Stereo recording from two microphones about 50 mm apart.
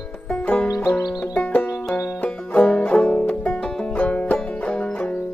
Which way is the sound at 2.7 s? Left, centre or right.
Centre.